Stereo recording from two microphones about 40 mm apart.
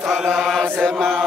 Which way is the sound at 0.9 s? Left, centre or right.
Centre.